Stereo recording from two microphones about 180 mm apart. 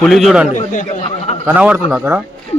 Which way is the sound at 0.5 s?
45° left (ahead or behind).